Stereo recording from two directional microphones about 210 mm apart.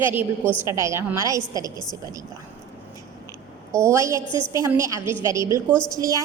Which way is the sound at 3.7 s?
15° right (ahead or behind).